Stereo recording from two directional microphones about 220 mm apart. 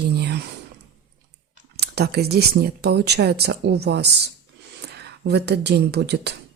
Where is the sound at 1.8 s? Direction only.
45° right (ahead or behind).